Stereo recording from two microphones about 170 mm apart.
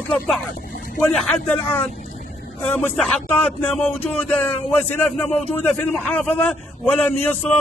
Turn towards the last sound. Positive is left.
turn(degrees=10)  # may be behind; listen again after turning